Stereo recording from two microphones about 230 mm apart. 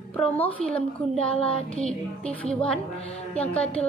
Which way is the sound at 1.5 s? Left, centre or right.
Left.